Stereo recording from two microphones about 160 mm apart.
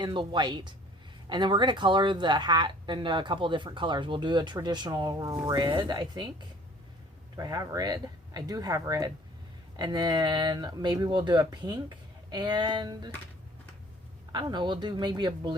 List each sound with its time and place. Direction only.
0.0 s speech: 30° right (ahead or behind)
14.3 s speech: 30° right (ahead or behind)